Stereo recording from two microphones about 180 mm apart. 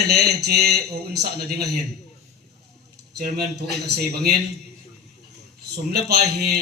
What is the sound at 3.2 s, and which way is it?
Speech, 60° right (ahead or behind).